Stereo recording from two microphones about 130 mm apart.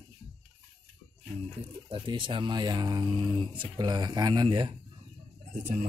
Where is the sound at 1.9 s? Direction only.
40° right (ahead or behind).